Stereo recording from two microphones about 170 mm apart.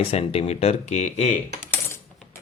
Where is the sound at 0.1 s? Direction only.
35° left (ahead or behind).